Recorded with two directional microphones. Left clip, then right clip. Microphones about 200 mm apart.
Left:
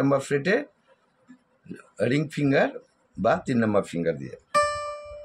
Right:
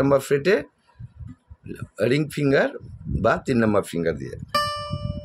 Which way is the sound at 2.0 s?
50° right (ahead or behind).